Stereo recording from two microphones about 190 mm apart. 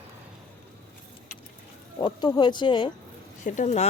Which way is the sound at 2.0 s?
20° left (ahead or behind).